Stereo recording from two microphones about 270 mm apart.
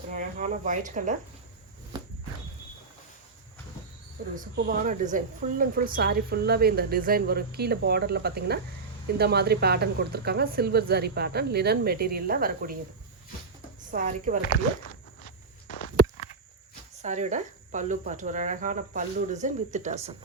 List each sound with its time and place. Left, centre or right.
0.1 s speech: right
4.4 s a woman's voice: right
13.9 s speech: right
15.2 s walk: left
17.0 s speech: right